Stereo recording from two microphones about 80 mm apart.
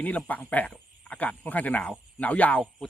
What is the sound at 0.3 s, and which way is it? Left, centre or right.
Speech, left.